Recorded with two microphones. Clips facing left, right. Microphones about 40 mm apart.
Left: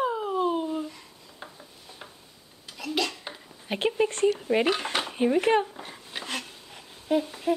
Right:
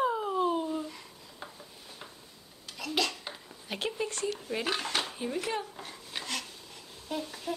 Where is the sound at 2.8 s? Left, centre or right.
Centre.